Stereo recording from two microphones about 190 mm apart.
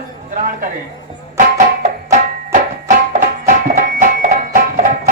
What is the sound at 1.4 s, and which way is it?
Music, 40° right (ahead or behind).